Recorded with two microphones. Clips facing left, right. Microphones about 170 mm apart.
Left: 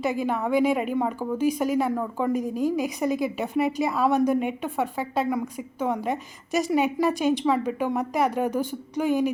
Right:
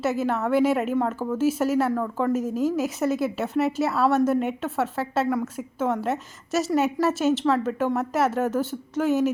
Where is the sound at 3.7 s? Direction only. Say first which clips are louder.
Right 1 dB; 15° left (ahead or behind).